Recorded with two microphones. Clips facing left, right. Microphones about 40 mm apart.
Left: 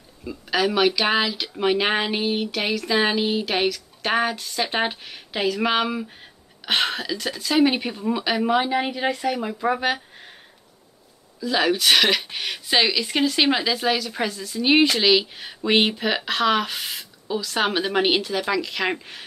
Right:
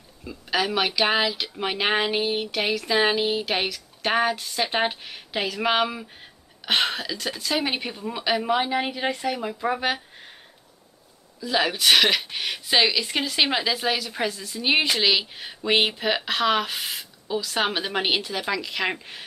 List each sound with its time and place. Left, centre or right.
0.2 s speech: centre
11.4 s speech: centre